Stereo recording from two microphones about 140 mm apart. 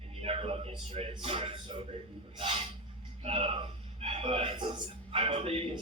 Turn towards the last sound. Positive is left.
turn(degrees=-45)  # may be behind; listen again after turning